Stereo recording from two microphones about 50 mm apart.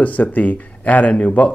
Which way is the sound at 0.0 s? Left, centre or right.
Left.